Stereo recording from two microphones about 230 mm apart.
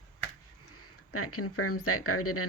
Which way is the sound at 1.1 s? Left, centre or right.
Left.